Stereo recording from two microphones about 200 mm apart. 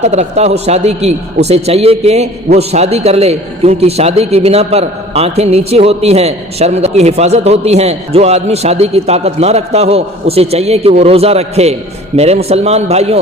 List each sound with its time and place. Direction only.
0.0 s a man's voice: 35° right (ahead or behind)